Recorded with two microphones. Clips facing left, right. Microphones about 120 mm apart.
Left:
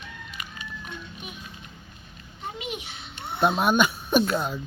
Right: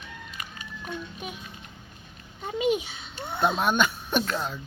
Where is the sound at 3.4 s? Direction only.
10° left (ahead or behind).